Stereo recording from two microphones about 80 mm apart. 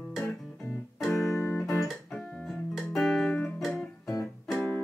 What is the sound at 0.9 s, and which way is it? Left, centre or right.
Music, centre.